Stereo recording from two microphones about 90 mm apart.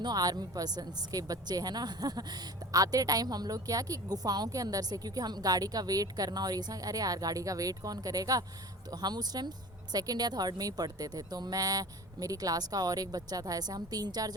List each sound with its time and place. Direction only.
0.0 s a woman's voice: 45° right (ahead or behind)